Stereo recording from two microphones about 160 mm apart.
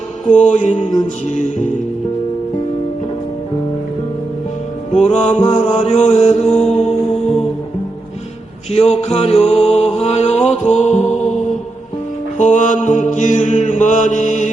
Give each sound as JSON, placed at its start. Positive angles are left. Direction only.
{"t": 0.3, "sound": "music", "side_deg": 50}
{"t": 5.2, "sound": "music", "side_deg": 45}
{"t": 8.7, "sound": "music", "side_deg": 40}
{"t": 12.4, "sound": "music", "side_deg": 50}